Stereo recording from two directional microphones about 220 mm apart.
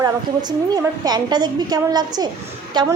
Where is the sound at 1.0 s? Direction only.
20° right (ahead or behind).